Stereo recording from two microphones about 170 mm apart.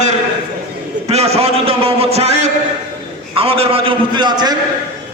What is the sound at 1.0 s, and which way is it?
A man's voice, 35° right (ahead or behind).